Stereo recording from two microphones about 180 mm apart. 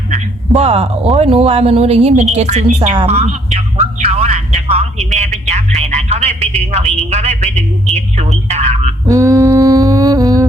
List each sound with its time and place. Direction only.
0.1 s a man's voice: 35° right (ahead or behind)
9.0 s humming: 20° right (ahead or behind)